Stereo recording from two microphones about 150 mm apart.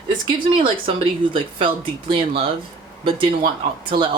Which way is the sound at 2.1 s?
40° right (ahead or behind).